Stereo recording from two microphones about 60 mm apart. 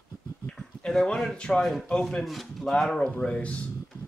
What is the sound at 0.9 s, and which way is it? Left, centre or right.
Speech, centre.